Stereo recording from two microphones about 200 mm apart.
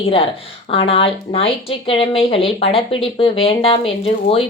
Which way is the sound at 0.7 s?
30° left (ahead or behind).